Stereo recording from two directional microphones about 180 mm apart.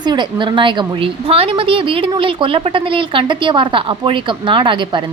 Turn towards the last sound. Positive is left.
turn(degrees=-25)  # may be behind; listen again after turning